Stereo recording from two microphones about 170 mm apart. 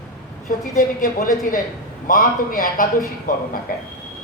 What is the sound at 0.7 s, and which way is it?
A woman's voice, 50° left (ahead or behind).